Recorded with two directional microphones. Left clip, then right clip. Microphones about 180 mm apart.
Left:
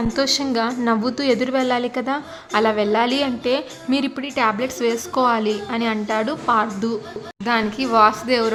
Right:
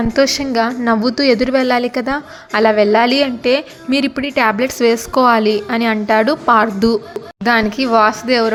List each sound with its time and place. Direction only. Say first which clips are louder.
0.2 s a woman's voice: right 6 dB; 20° right (ahead or behind)